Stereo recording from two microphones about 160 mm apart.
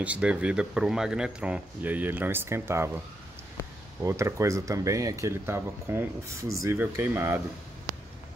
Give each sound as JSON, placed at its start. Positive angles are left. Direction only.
{"t": 0.0, "sound": "speech", "side_deg": -10}
{"t": 4.0, "sound": "speech", "side_deg": -15}